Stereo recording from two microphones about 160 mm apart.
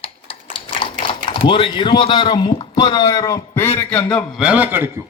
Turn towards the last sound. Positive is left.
turn(degrees=-10)  # may be behind; listen again after turning